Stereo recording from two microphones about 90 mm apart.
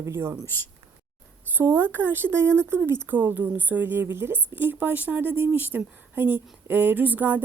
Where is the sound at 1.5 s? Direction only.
30° right (ahead or behind).